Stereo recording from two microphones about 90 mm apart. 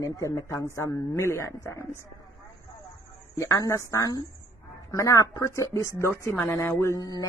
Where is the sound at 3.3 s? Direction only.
35° left (ahead or behind).